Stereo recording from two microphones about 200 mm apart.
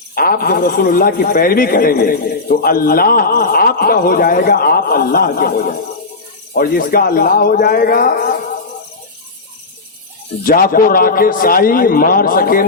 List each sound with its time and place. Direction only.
0.1 s a man's voice: 45° left (ahead or behind)
10.4 s a man's voice: 45° left (ahead or behind)